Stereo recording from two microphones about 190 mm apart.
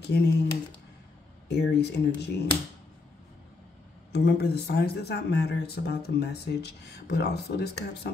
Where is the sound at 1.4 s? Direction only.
60° left (ahead or behind).